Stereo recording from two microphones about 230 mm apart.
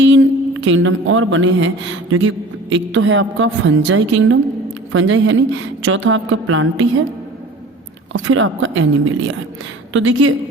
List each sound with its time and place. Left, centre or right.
0.0 s a woman's voice: right
8.1 s a woman's voice: right